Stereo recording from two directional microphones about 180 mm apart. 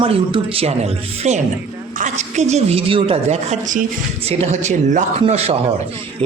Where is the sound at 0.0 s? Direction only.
30° right (ahead or behind).